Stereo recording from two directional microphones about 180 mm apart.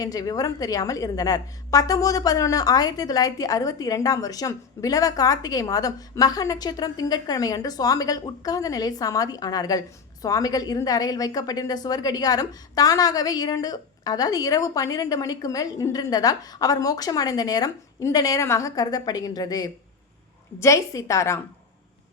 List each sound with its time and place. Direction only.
0.0 s a woman's voice: 20° left (ahead or behind)